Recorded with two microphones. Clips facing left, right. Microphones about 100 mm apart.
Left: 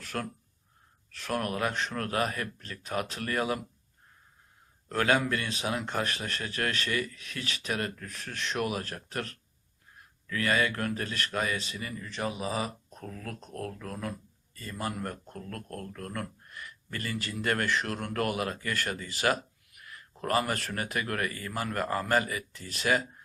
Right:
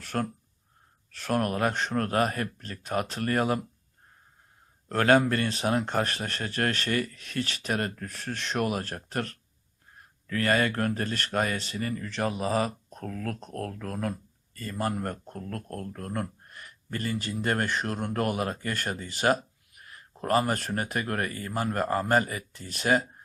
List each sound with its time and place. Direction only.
0.0 s speech: 35° right (ahead or behind)
4.9 s speech: 40° right (ahead or behind)